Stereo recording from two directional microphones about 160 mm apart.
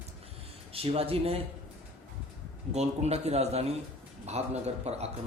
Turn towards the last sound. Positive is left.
turn(degrees=-40)  # may be behind; listen again after turning